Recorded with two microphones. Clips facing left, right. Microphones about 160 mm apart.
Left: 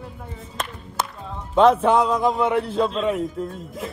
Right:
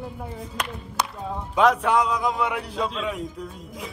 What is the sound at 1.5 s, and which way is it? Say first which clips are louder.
A man's voice: left 4 dB; centre (ahead or behind).